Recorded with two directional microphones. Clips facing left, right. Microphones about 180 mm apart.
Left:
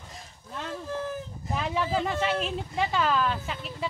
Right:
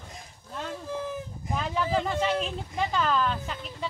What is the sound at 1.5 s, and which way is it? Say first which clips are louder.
Speech: even; 5° left (ahead or behind).